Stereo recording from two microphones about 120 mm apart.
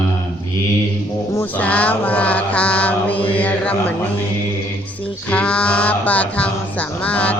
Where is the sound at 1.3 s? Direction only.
15° left (ahead or behind).